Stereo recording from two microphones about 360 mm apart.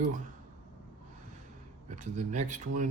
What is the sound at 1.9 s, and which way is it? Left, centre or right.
Speech, centre.